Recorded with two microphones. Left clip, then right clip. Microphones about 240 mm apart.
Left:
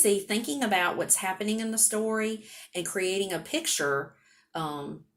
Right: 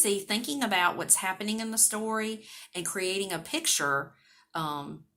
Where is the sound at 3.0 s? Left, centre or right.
Right.